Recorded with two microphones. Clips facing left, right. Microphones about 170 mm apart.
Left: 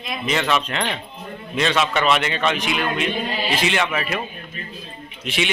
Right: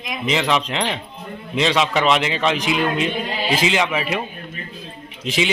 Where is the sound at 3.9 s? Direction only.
10° right (ahead or behind).